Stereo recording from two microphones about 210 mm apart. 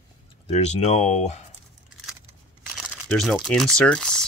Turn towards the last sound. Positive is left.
turn(degrees=5)  # may be behind; listen again after turning